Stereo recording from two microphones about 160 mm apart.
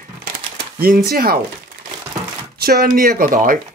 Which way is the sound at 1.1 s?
70° right (ahead or behind).